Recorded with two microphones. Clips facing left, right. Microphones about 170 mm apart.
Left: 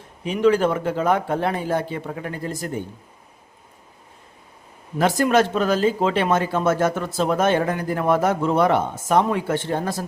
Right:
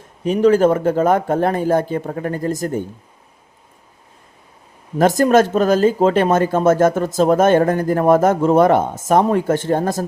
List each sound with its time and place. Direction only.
0.3 s speech: 45° right (ahead or behind)
4.9 s speech: 45° right (ahead or behind)